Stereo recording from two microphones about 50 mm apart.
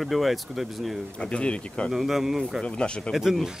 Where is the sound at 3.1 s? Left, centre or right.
Centre.